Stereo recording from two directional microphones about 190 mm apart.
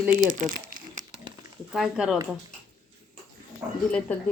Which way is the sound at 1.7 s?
5° right (ahead or behind).